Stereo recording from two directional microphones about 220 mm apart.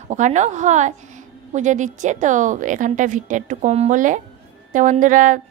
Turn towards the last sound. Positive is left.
turn(degrees=-35)  # may be behind; listen again after turning